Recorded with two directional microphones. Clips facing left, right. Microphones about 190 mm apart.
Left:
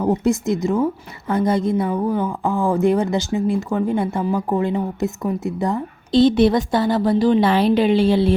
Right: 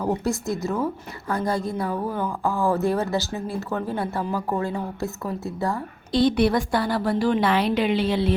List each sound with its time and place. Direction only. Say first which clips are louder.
0.0 s speech: left 6 dB; 20° left (ahead or behind)